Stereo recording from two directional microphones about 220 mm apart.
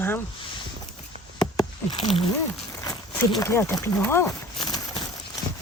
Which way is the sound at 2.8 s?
20° left (ahead or behind).